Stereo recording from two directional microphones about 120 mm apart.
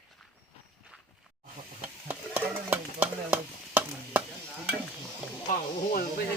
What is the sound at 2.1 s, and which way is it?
Stir, 15° right (ahead or behind).